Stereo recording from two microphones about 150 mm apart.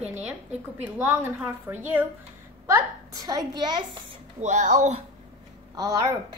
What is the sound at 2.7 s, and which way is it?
A woman's voice, 25° right (ahead or behind).